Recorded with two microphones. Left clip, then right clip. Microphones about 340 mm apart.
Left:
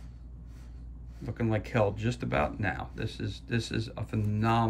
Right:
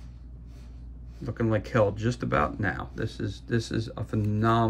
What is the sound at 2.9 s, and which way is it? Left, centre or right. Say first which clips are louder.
Speech: right 4 dB; centre.